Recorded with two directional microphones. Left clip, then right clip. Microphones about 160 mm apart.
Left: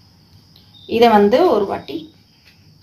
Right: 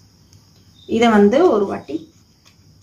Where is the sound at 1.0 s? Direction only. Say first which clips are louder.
Left 2 dB; 35° right (ahead or behind).